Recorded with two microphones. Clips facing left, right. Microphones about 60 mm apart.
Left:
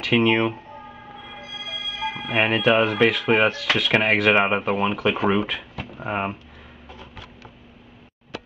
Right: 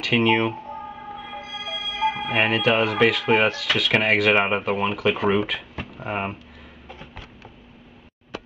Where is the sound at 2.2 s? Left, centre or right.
Centre.